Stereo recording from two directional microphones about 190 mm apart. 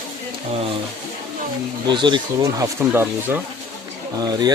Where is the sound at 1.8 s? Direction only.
25° right (ahead or behind).